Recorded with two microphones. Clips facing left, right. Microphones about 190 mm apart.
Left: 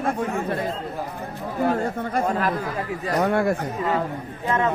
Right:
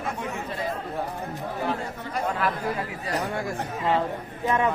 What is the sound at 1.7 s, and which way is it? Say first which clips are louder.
Speech: left 6 dB; 50° left (ahead or behind).